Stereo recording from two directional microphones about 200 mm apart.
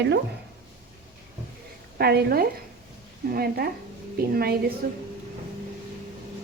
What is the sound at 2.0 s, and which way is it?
A woman's voice, 50° right (ahead or behind).